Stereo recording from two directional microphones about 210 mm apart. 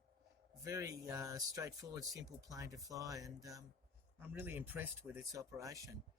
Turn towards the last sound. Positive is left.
turn(degrees=-15)  # may be behind; listen again after turning